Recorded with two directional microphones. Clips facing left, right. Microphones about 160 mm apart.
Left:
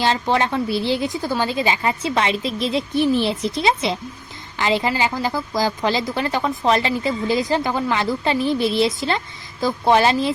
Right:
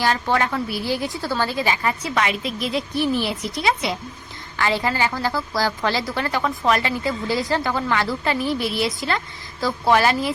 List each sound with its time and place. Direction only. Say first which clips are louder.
0.0 s a woman's voice: left 2 dB; 20° left (ahead or behind)